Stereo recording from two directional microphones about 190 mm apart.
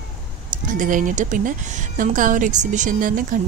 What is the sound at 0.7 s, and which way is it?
Speech, 45° right (ahead or behind).